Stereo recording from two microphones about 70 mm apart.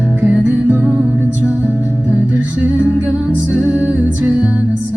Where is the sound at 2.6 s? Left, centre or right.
Right.